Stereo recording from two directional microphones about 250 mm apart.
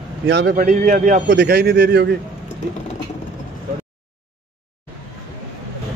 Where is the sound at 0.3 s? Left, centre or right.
Right.